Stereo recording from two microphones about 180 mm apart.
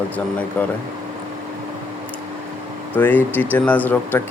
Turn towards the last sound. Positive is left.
turn(degrees=10)  # may be behind; listen again after turning